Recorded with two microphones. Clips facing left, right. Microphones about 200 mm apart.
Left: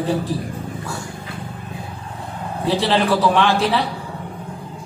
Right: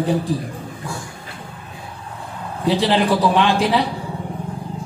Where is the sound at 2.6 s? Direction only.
15° right (ahead or behind).